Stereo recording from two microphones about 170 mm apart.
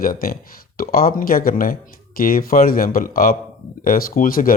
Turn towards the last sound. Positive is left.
turn(degrees=55)  # may be behind; listen again after turning